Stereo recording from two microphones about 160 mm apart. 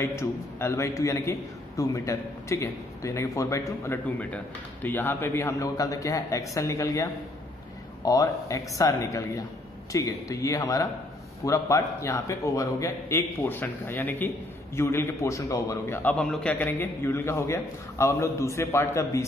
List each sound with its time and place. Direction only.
0.0 s a man's voice: 15° left (ahead or behind)